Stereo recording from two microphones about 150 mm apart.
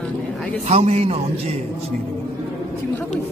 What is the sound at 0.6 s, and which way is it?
Speech, 45° right (ahead or behind).